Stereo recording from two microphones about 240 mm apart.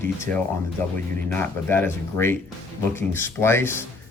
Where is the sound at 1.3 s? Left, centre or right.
Centre.